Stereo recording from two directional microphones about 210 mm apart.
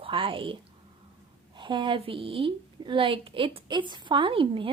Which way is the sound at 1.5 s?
20° right (ahead or behind).